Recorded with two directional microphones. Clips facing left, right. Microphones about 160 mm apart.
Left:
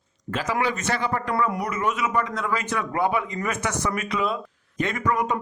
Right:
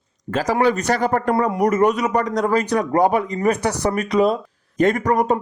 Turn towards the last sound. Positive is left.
turn(degrees=-40)  # may be behind; listen again after turning